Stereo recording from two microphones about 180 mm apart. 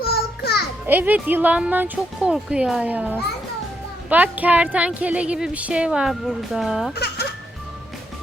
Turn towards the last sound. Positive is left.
turn(degrees=65)  # may be behind; listen again after turning